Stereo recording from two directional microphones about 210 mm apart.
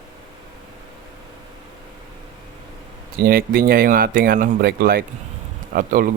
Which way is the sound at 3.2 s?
45° right (ahead or behind).